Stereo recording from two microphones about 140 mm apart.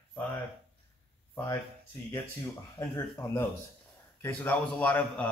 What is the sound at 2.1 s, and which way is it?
Speech, 20° left (ahead or behind).